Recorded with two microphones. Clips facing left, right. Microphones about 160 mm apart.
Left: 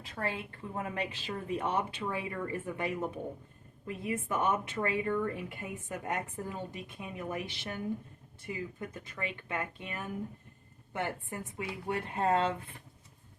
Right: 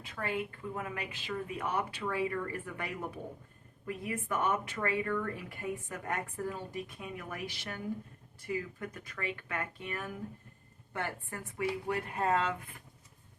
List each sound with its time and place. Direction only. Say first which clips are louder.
0.0 s speech: right 1 dB; 35° left (ahead or behind)